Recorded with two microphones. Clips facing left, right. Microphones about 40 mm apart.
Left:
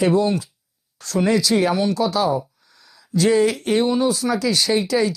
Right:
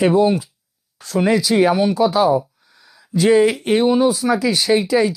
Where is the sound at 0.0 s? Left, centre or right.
Centre.